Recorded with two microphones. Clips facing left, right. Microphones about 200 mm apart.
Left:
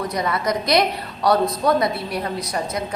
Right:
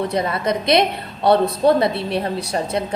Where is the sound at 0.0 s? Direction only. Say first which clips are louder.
Right 2 dB; 25° right (ahead or behind).